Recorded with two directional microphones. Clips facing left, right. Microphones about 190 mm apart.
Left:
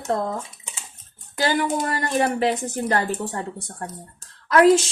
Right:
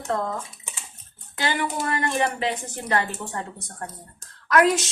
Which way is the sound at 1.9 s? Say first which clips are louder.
Left 2 dB; 40° left (ahead or behind).